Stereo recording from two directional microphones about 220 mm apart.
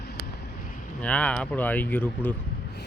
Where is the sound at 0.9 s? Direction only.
5° left (ahead or behind).